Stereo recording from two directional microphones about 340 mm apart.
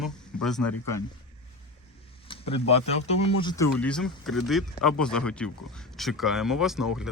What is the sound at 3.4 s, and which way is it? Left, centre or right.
Speech, centre.